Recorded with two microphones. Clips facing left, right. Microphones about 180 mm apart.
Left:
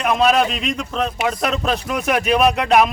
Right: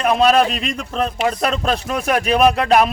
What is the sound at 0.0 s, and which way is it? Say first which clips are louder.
Speech: right 2 dB; 35° right (ahead or behind).